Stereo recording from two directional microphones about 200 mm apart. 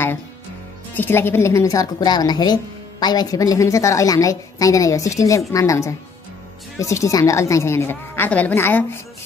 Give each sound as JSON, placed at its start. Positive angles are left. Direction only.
{"t": 0.9, "sound": "a woman's voice", "side_deg": 10}